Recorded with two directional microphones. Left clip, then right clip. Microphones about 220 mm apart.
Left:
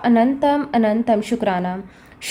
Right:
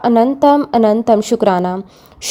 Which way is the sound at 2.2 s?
25° right (ahead or behind).